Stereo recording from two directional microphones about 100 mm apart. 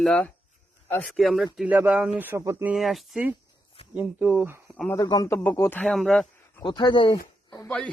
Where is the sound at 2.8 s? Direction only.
Centre (ahead or behind).